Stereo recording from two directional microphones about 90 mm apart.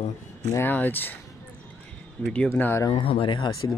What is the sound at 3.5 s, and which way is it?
Speech, 40° left (ahead or behind).